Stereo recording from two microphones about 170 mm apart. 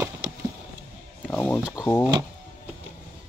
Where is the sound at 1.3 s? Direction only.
10° left (ahead or behind).